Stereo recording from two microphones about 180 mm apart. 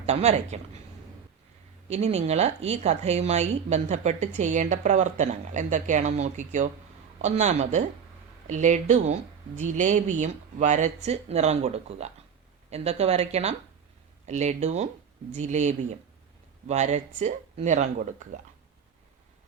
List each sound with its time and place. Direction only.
0.0 s speech: 35° right (ahead or behind)
1.9 s a woman's voice: 35° right (ahead or behind)